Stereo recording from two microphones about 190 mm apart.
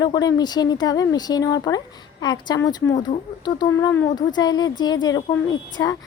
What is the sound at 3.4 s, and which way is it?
Speech, 20° left (ahead or behind).